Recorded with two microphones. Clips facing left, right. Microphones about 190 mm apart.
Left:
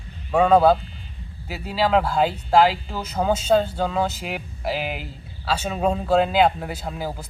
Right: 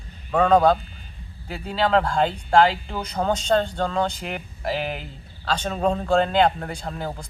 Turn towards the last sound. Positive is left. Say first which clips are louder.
# left 1 dB
turn(degrees=5)  # may be behind; listen again after turning